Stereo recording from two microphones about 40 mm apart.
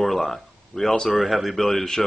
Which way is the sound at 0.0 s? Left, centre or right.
Centre.